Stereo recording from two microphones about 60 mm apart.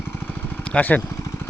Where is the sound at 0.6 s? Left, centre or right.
Left.